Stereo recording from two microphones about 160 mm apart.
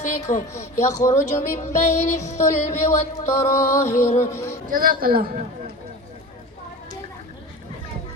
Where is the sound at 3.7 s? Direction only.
15° left (ahead or behind).